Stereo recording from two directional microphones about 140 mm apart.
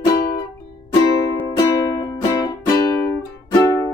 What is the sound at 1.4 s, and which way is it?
Music, 25° left (ahead or behind).